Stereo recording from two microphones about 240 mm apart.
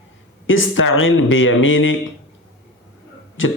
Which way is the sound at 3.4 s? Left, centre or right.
Left.